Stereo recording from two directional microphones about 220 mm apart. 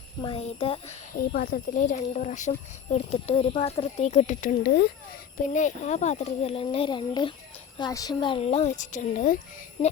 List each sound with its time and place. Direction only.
0.2 s speech: 25° left (ahead or behind)
1.3 s speech: 40° left (ahead or behind)
5.4 s speech: 35° left (ahead or behind)